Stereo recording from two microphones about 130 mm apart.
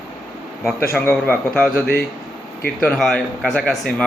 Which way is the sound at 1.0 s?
15° left (ahead or behind).